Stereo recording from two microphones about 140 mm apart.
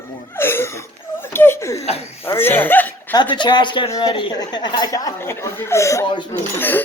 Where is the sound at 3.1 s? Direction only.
35° left (ahead or behind).